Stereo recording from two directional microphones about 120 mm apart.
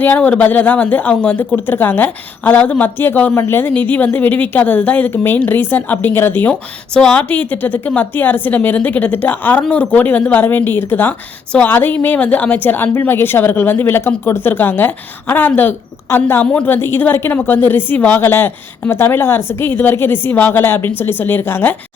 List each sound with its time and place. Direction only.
0.0 s speech: 15° left (ahead or behind)